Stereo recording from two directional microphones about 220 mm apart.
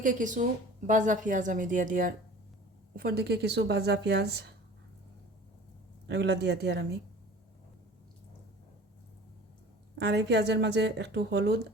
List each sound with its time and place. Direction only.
0.0 s a woman's voice: 35° right (ahead or behind)
6.1 s speech: 50° right (ahead or behind)
10.0 s speech: 50° right (ahead or behind)